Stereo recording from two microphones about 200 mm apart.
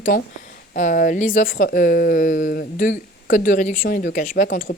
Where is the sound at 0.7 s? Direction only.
40° left (ahead or behind).